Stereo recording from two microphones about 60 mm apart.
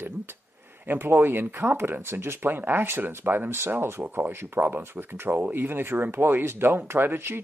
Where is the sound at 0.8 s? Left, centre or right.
Right.